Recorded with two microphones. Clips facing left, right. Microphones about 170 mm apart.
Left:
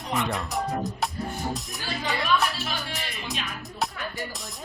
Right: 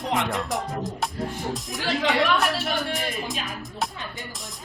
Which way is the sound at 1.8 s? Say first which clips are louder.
Right 9 dB; 90° right.